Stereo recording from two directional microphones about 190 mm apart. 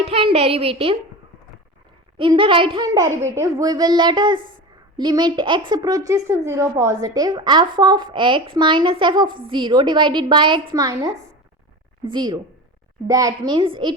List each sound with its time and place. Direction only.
0.0 s a child's voice: 30° right (ahead or behind)
2.1 s a woman's voice: 25° right (ahead or behind)